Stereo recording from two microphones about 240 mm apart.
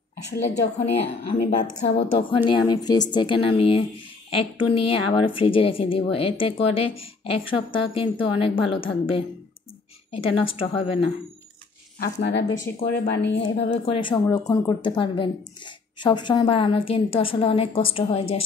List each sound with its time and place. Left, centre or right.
0.8 s speech: left
2.1 s speech: left
12.0 s speech: left
13.9 s speech: centre